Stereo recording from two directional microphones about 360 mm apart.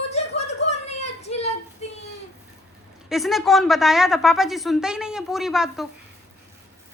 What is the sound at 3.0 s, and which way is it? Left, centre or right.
Speech, centre.